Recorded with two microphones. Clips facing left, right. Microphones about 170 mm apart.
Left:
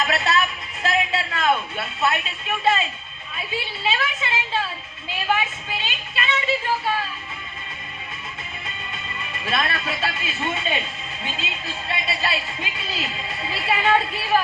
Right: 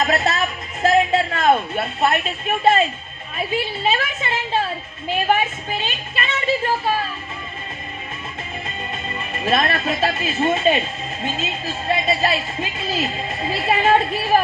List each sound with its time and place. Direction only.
0.0 s a sound: 40° right (ahead or behind)
3.8 s speech: 50° right (ahead or behind)
8.9 s speech: 45° right (ahead or behind)